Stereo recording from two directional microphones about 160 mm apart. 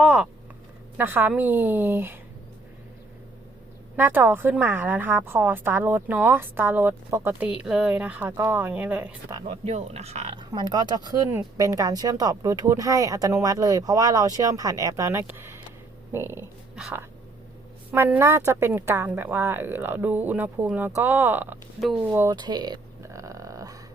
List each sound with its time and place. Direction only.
0.0 s a woman's voice: 5° right (ahead or behind)
3.9 s a woman's voice: 10° right (ahead or behind)
9.5 s speech: 45° right (ahead or behind)
10.3 s a woman's voice: 25° right (ahead or behind)
16.7 s speech: 5° right (ahead or behind)
17.9 s a woman's voice: 15° right (ahead or behind)
22.4 s a sound: 25° right (ahead or behind)